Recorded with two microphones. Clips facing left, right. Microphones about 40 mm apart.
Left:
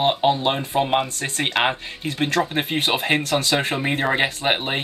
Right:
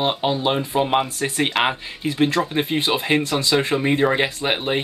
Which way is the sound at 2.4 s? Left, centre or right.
Centre.